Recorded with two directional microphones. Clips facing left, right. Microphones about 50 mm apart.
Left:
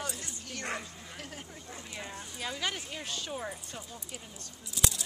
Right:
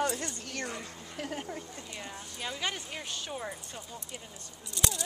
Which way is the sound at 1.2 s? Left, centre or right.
Right.